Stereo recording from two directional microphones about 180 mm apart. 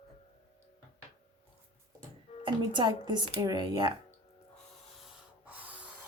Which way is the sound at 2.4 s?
25° right (ahead or behind).